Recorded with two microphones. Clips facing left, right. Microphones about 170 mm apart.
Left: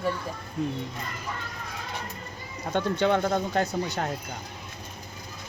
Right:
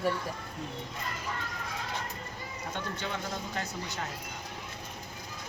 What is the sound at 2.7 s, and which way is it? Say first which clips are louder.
Speech: left 14 dB; 70° left (ahead or behind).